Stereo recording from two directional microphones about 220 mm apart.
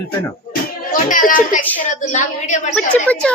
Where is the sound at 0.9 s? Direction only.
40° left (ahead or behind).